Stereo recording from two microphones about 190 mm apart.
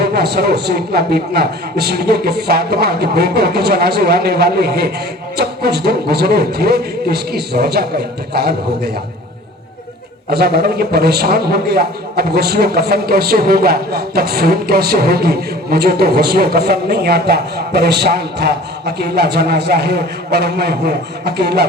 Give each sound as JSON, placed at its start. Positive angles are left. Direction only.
{"t": 0.0, "sound": "a man's voice", "side_deg": -60}
{"t": 10.2, "sound": "a man's voice", "side_deg": -55}